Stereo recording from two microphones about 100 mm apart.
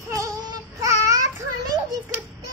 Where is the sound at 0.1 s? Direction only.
35° right (ahead or behind).